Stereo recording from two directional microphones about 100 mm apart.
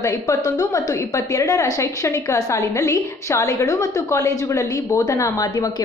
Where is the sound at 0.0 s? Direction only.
35° left (ahead or behind).